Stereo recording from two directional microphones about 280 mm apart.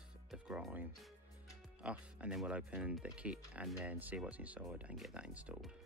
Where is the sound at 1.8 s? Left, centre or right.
Centre.